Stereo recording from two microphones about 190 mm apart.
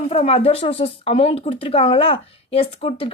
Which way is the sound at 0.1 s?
30° left (ahead or behind).